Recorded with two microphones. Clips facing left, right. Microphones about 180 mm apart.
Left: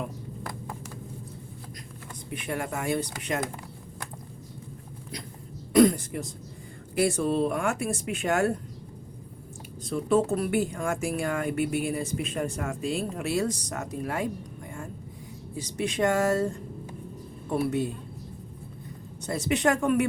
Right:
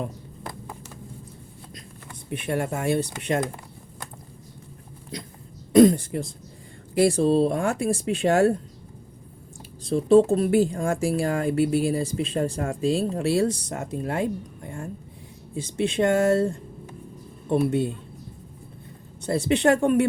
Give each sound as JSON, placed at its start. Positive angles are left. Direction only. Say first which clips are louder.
{"t": 2.3, "sound": "speech", "louder": "right 5 dB", "side_deg": -25}
{"t": 5.1, "sound": "speech", "louder": "right 4 dB", "side_deg": -25}
{"t": 9.8, "sound": "speech", "louder": "right 7 dB", "side_deg": -30}
{"t": 15.5, "sound": "speech", "louder": "right 5 dB", "side_deg": -25}
{"t": 17.5, "sound": "speech", "louder": "right 4 dB", "side_deg": -25}
{"t": 19.2, "sound": "speech", "louder": "right 5 dB", "side_deg": -30}